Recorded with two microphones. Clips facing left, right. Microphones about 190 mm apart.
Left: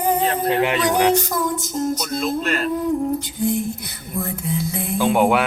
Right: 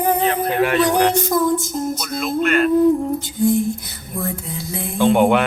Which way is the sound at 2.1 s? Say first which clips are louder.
Right 8 dB; 35° left (ahead or behind).